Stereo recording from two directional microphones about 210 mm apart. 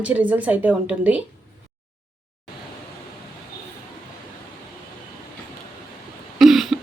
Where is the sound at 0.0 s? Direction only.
5° right (ahead or behind).